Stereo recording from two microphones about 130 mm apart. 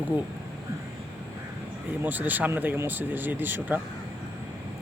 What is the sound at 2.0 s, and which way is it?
Speech, 15° right (ahead or behind).